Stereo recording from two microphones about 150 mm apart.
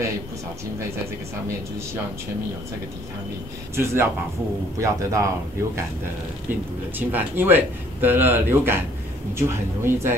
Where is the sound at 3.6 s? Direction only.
20° right (ahead or behind).